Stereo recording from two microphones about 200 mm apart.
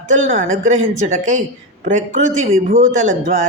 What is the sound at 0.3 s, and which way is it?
Speech, 40° right (ahead or behind).